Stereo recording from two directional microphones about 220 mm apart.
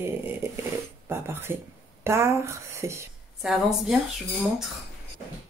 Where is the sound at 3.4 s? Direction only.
Centre (ahead or behind).